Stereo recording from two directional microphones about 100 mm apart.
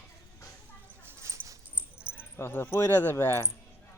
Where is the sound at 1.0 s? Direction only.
25° right (ahead or behind).